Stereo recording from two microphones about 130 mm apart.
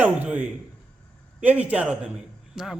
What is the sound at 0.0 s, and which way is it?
A man's voice, 10° right (ahead or behind).